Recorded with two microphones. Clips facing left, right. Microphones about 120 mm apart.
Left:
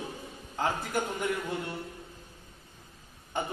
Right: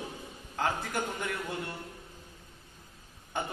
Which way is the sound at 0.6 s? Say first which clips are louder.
Left 2 dB; 10° left (ahead or behind).